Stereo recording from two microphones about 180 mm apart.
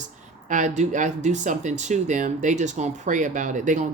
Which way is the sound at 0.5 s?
40° right (ahead or behind).